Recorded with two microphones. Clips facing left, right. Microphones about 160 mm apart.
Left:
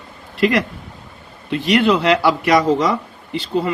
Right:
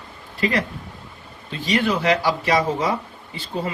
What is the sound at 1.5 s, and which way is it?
Speech, 70° left (ahead or behind).